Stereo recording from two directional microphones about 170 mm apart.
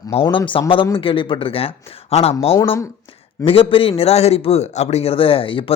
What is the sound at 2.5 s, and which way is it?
Speech, 15° left (ahead or behind).